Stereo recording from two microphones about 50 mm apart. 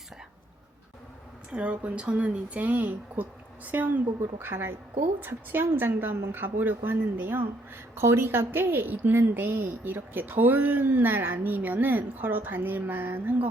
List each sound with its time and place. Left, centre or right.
1.5 s a woman's voice: right
7.9 s a woman's voice: right